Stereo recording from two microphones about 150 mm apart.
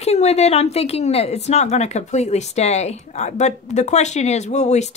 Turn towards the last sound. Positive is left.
turn(degrees=50)  # may be behind; listen again after turning